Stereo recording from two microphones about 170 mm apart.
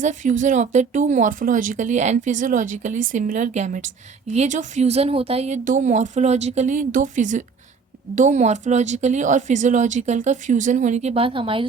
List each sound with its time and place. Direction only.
0.0 s speech: 45° right (ahead or behind)
5.6 s speech: 45° right (ahead or behind); by 11.6 s 30° right (ahead or behind)